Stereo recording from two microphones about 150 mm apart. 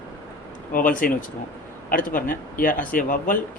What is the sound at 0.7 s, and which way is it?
Speech, 65° left (ahead or behind).